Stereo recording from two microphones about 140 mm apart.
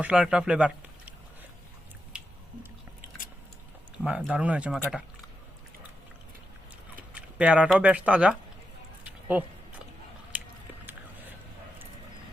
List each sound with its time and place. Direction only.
0.0 s speech: 10° right (ahead or behind)
4.3 s speech: 10° right (ahead or behind)
7.1 s a sound: 10° right (ahead or behind)
7.8 s speech: 10° right (ahead or behind)
9.0 s a sound: 10° right (ahead or behind)
10.3 s biting: 10° right (ahead or behind)